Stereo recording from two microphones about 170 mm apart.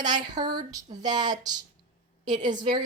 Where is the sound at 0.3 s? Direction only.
25° right (ahead or behind).